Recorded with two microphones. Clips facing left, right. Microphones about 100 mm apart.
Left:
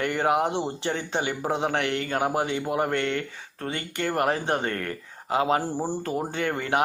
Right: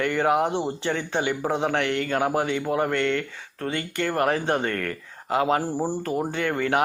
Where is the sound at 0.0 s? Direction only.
25° left (ahead or behind).